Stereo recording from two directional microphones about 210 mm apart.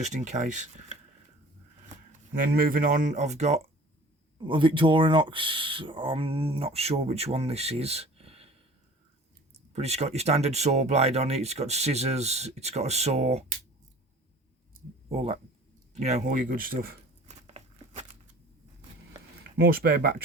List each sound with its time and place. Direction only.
0.0 s speech: 35° right (ahead or behind)
2.3 s speech: 40° right (ahead or behind)
9.7 s speech: 30° right (ahead or behind)
15.1 s speech: 25° right (ahead or behind)
16.0 s crumpling: 35° right (ahead or behind)
19.4 s speech: 45° right (ahead or behind)